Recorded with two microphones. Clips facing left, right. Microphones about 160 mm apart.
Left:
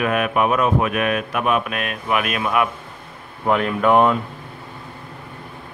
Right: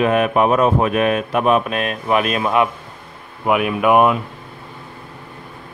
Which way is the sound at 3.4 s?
10° right (ahead or behind).